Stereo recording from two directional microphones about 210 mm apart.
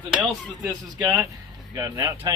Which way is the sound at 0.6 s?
10° right (ahead or behind).